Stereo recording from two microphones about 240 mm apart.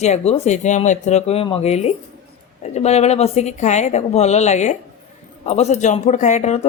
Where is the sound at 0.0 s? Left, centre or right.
Left.